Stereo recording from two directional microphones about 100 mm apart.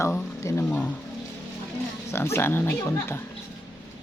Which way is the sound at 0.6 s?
15° left (ahead or behind).